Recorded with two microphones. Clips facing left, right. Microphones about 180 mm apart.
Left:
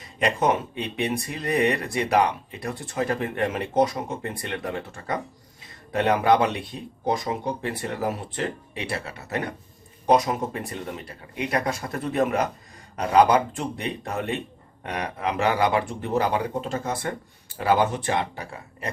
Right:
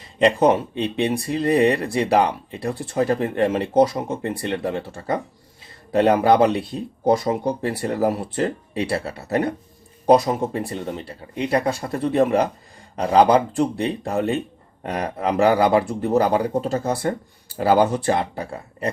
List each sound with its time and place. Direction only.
0.2 s speech: 30° right (ahead or behind)